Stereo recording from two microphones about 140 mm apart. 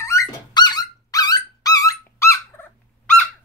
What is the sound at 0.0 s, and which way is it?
Dog, 20° left (ahead or behind).